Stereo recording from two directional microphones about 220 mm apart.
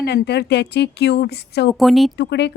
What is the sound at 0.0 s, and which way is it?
Speech, 50° left (ahead or behind).